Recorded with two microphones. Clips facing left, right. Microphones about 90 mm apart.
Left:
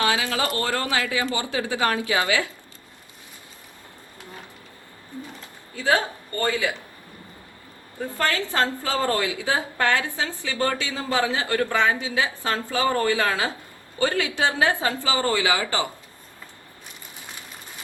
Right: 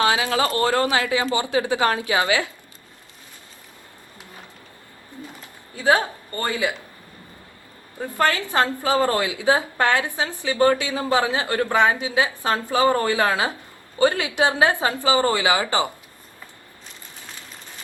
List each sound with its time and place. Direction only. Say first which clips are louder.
0.0 s a woman's voice: right 3 dB; 30° right (ahead or behind)
5.7 s speech: right 3 dB; 20° right (ahead or behind)
8.0 s a woman's voice: right 3 dB; 20° right (ahead or behind)